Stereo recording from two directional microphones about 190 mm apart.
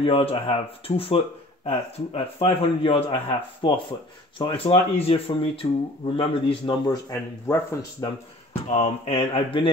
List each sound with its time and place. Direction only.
0.0 s speech: 30° left (ahead or behind)
8.7 s mantra: 35° left (ahead or behind)